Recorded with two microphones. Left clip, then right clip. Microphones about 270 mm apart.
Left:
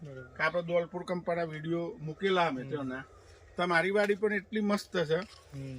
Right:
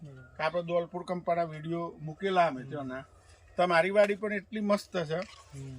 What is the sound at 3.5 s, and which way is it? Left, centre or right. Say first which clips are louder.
Speech: right 4 dB; centre.